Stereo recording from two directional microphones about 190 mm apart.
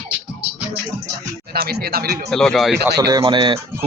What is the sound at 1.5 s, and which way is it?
Speech, 55° right (ahead or behind).